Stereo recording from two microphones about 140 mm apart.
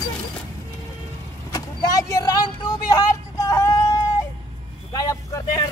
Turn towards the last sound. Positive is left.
turn(degrees=25)  # may be behind; listen again after turning